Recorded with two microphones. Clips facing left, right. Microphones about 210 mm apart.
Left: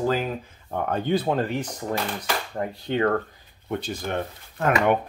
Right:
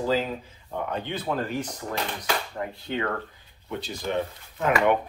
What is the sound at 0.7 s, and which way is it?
Speech, 50° left (ahead or behind).